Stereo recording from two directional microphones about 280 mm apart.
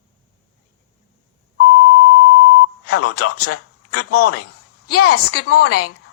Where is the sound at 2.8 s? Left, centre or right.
Left.